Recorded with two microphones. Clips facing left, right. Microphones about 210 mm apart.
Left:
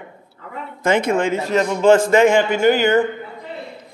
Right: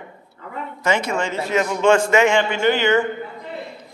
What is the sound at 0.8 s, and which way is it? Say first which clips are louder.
Speech: left 5 dB; 55° left (ahead or behind).